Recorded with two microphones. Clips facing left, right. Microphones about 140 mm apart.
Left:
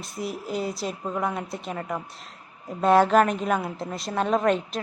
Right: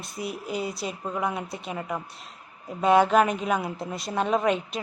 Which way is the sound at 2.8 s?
Centre (ahead or behind).